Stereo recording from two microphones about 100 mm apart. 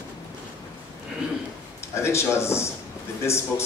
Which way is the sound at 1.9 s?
25° left (ahead or behind).